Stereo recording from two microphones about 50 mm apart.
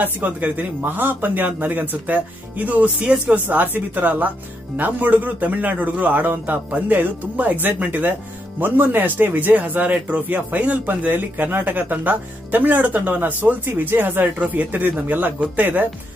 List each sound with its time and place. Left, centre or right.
0.0 s speech: right
3.4 s speech: right